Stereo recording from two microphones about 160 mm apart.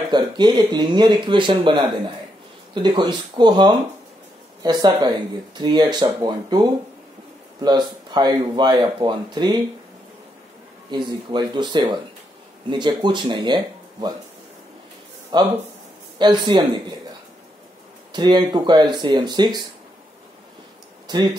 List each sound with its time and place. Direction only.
0.1 s speech: 30° right (ahead or behind)
10.9 s speech: 30° right (ahead or behind)
15.3 s speech: 30° right (ahead or behind)
18.1 s speech: 30° right (ahead or behind)
21.1 s speech: 25° right (ahead or behind)